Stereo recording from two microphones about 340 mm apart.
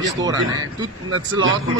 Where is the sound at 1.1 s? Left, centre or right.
Right.